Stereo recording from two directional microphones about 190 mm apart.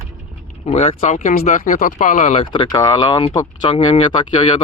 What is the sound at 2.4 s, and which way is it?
Speech, 25° left (ahead or behind).